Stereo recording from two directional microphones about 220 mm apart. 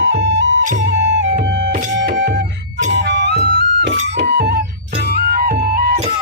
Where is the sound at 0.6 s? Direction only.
35° right (ahead or behind).